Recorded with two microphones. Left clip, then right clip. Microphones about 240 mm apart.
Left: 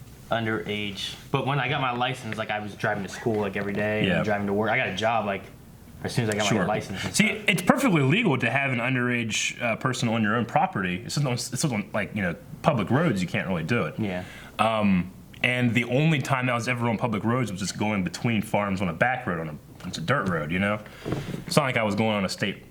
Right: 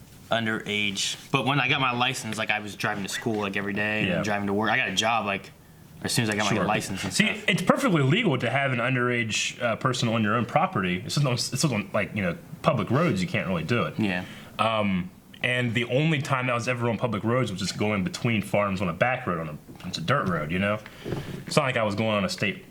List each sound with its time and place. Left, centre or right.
0.3 s speech: left
6.9 s speech: right
14.5 s speech: right
21.5 s speech: right